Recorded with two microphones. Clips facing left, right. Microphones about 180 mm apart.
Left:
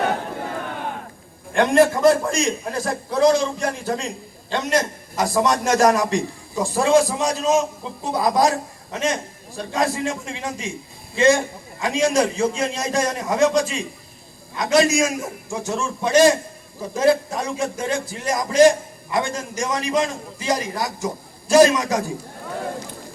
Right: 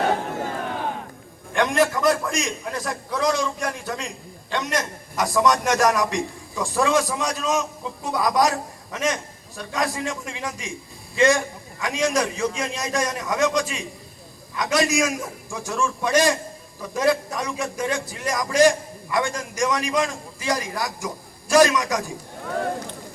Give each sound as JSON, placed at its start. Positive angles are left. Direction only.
{"t": 1.5, "sound": "a man's voice", "side_deg": 30}